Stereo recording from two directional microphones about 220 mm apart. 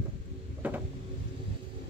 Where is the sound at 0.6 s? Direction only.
5° right (ahead or behind).